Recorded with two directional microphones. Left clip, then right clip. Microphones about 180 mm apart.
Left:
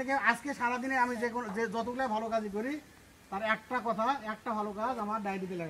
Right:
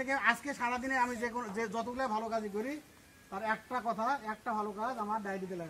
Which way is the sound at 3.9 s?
45° left (ahead or behind).